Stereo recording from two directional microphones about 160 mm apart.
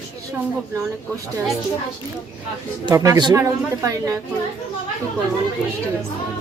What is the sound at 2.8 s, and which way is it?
Speech, 20° right (ahead or behind).